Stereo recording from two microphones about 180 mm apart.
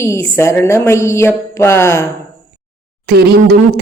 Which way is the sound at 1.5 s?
15° left (ahead or behind).